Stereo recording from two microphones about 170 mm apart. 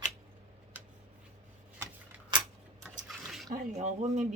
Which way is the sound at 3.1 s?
Centre (ahead or behind).